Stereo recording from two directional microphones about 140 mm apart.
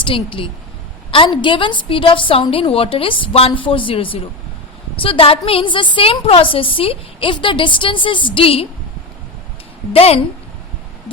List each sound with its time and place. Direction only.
0.0 s a woman's voice: 40° left (ahead or behind)
9.9 s a woman's voice: 45° left (ahead or behind)